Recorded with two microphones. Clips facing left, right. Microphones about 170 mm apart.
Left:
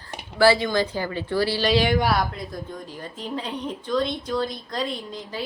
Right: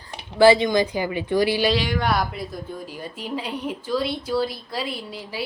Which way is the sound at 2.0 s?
5° left (ahead or behind).